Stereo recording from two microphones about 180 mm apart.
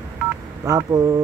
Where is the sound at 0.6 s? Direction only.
20° right (ahead or behind).